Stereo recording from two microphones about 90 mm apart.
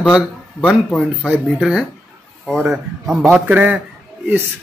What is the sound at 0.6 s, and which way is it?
Speech, 10° left (ahead or behind).